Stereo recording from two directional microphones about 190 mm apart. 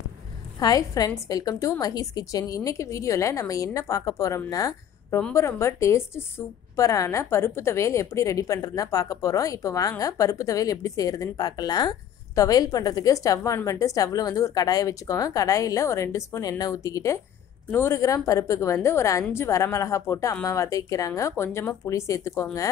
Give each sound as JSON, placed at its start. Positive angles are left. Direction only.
{"t": 0.6, "sound": "a woman's voice", "side_deg": 20}